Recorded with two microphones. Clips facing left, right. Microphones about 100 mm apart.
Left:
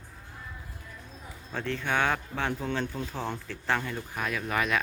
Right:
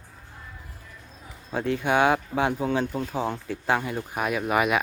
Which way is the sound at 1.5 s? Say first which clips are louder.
Right 6 dB; 15° right (ahead or behind).